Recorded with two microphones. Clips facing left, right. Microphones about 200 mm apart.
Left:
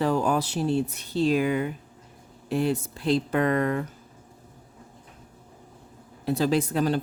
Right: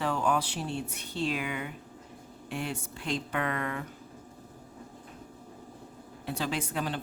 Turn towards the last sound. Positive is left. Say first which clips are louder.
# left 9 dB
turn(degrees=40)  # may be behind; listen again after turning